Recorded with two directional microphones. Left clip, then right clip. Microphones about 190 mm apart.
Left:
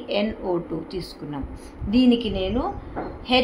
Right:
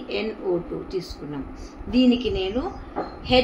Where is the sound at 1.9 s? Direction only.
40° left (ahead or behind).